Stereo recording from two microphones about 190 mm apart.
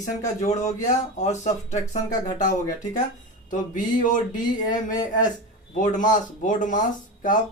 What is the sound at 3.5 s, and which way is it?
Speech, 45° left (ahead or behind).